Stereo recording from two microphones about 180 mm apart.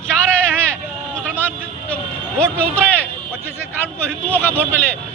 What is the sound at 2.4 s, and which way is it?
Speech, 10° left (ahead or behind).